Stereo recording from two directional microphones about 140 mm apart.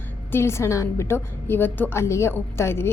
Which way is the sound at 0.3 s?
20° left (ahead or behind).